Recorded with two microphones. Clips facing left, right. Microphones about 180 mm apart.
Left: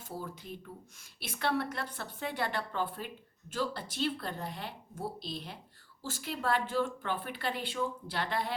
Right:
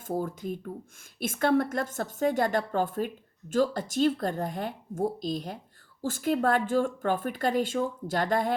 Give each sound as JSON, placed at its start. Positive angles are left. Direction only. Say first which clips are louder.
{"t": 0.1, "sound": "speech", "louder": "right 11 dB", "side_deg": -50}